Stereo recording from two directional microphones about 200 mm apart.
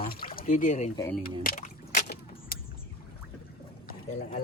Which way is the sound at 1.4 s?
45° left (ahead or behind).